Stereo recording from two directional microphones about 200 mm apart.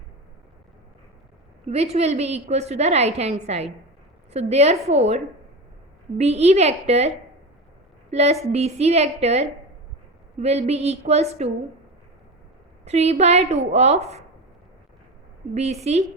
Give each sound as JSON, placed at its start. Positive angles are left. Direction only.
{"t": 1.6, "sound": "a woman's voice", "side_deg": -30}
{"t": 8.1, "sound": "a woman's voice", "side_deg": -35}
{"t": 12.8, "sound": "a woman's voice", "side_deg": -35}
{"t": 15.5, "sound": "a woman's voice", "side_deg": -35}